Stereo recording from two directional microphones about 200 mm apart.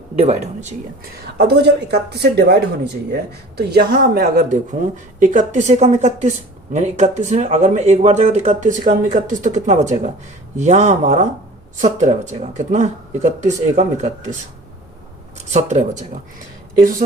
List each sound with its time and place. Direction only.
0.2 s speech: 35° right (ahead or behind)
1.4 s a man's voice: 55° right (ahead or behind)
5.2 s speech: 40° right (ahead or behind)
15.4 s speech: 35° right (ahead or behind)